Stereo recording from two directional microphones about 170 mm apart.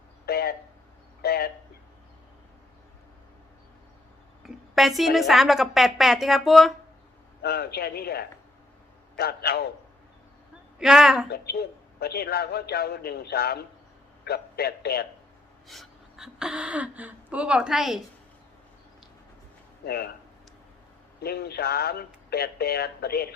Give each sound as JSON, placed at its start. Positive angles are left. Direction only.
{"t": 0.3, "sound": "a sound", "side_deg": 65}
{"t": 4.4, "sound": "speech", "side_deg": 0}
{"t": 7.4, "sound": "a man's voice", "side_deg": 65}
{"t": 10.8, "sound": "speech", "side_deg": -5}
{"t": 11.3, "sound": "a man's voice", "side_deg": 70}
{"t": 15.6, "sound": "speech", "side_deg": 0}
{"t": 19.8, "sound": "speech", "side_deg": 65}
{"t": 21.2, "sound": "a man's voice", "side_deg": 70}